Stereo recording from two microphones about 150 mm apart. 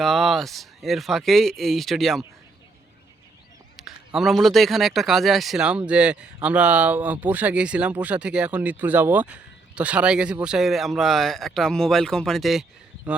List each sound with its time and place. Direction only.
0.0 s speech: centre (ahead or behind)
3.8 s a man's voice: centre (ahead or behind)